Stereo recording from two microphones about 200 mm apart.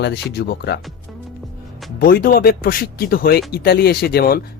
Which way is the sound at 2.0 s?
45° left (ahead or behind).